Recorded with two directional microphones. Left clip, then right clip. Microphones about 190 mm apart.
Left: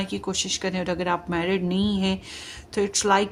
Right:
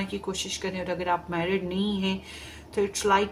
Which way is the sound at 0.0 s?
55° left (ahead or behind).